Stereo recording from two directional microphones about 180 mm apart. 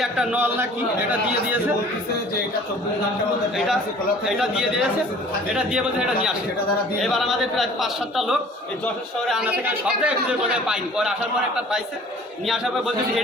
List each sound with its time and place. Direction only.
0.0 s a man's voice: 5° right (ahead or behind)
4.3 s a man's voice: 5° right (ahead or behind)